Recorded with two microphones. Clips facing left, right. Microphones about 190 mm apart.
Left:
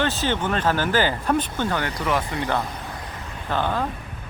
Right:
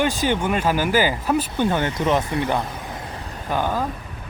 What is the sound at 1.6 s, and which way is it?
Speech, 20° right (ahead or behind).